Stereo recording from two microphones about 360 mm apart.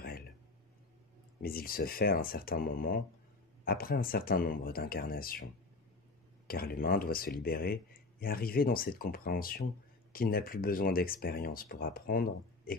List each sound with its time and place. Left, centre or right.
1.4 s speech: left